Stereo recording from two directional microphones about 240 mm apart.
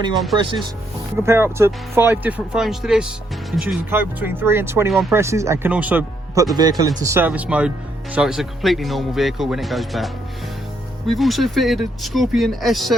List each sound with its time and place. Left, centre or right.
1.1 s speech: centre
5.1 s speech: centre